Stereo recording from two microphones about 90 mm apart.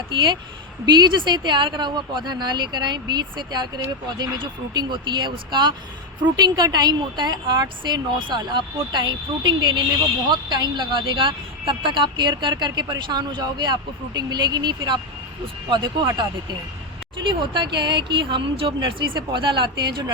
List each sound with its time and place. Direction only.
0.9 s speech: 55° right (ahead or behind)
17.2 s speech: 60° right (ahead or behind)